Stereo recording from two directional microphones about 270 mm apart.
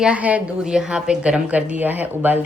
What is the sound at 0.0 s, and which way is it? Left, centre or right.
A woman's voice, centre.